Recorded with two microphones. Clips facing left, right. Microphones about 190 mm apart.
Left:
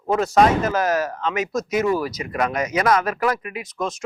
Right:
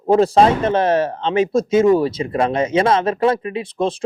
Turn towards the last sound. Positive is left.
turn(degrees=-30)  # may be behind; listen again after turning